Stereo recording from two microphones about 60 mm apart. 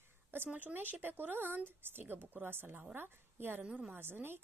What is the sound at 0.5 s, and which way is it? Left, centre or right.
Speech, right.